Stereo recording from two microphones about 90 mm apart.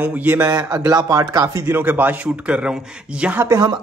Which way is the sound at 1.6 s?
20° right (ahead or behind).